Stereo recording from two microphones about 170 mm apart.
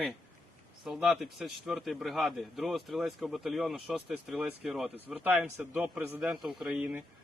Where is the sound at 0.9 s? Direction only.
5° right (ahead or behind).